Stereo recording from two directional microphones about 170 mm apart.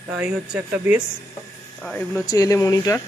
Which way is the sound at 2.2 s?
20° left (ahead or behind).